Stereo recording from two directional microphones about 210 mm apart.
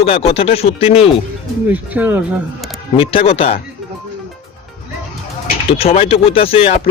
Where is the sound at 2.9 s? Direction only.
25° left (ahead or behind).